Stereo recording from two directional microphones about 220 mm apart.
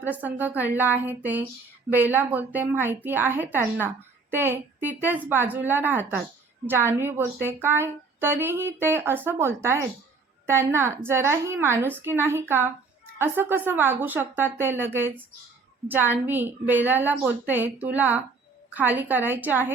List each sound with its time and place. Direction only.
0.0 s a woman's voice: 10° right (ahead or behind)